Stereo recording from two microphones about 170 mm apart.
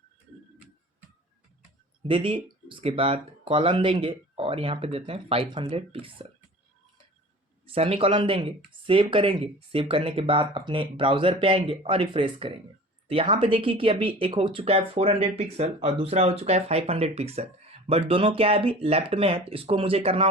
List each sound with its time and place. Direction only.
2.0 s speech: 30° right (ahead or behind)
7.7 s speech: 35° right (ahead or behind)